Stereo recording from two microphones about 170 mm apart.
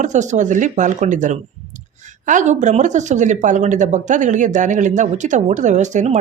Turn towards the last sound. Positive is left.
turn(degrees=-45)  # may be behind; listen again after turning